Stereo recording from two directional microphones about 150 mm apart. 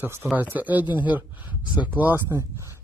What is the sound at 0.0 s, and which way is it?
Speech, 15° right (ahead or behind).